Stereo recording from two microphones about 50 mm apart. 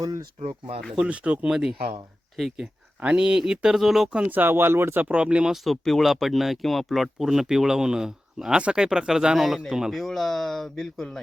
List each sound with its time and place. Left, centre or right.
0.9 s speech: right
2.3 s speech: centre
3.0 s speech: centre
4.3 s speech: right
5.1 s speech: right
5.6 s speech: centre
9.9 s speech: centre